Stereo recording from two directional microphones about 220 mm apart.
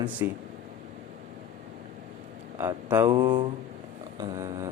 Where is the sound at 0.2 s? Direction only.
10° right (ahead or behind).